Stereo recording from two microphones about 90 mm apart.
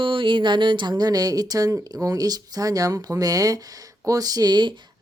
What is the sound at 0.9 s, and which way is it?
Speech, 45° right (ahead or behind).